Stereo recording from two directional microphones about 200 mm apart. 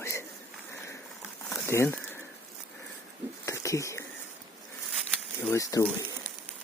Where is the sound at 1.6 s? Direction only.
15° left (ahead or behind).